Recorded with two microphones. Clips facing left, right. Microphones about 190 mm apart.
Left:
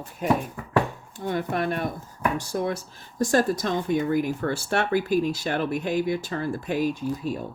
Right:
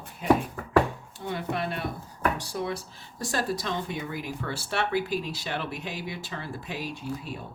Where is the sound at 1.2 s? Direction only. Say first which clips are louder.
Left 5 dB; 45° left (ahead or behind).